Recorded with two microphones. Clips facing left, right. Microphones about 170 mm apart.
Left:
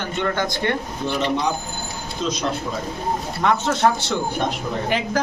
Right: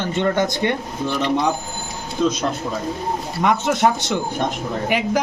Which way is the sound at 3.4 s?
15° right (ahead or behind).